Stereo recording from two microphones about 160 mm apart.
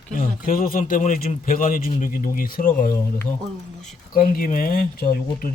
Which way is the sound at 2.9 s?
15° left (ahead or behind).